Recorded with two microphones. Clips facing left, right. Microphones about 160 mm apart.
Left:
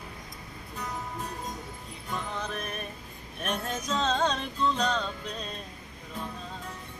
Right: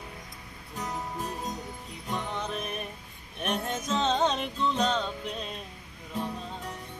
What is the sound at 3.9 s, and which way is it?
Music, 20° right (ahead or behind).